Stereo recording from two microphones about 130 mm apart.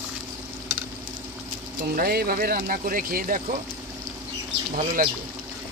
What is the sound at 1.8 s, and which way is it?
Speech, 90° right.